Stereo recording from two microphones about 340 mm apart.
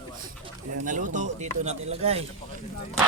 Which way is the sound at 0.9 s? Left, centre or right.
Right.